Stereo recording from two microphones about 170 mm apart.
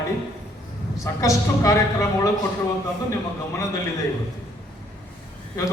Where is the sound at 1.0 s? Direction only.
20° left (ahead or behind).